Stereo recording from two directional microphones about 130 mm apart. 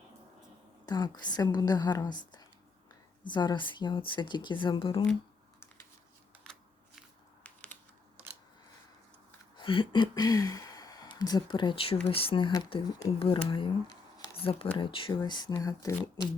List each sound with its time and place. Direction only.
0.9 s speech: 30° left (ahead or behind)
6.4 s camera: 5° left (ahead or behind)
7.4 s typing: 10° left (ahead or behind)
9.6 s speech: 40° left (ahead or behind)